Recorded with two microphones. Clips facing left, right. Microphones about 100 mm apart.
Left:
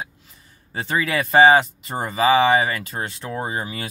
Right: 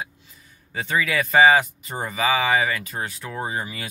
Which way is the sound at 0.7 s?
30° left (ahead or behind).